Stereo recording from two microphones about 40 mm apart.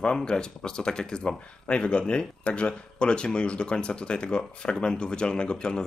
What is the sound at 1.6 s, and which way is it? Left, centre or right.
Speech, left.